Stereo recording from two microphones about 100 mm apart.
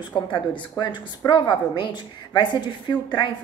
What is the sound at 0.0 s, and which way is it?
A woman's voice, 50° left (ahead or behind).